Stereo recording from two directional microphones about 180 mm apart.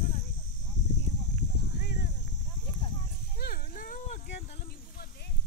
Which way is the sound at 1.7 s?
65° left (ahead or behind).